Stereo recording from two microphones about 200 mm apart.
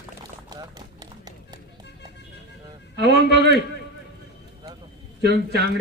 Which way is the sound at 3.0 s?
55° right (ahead or behind).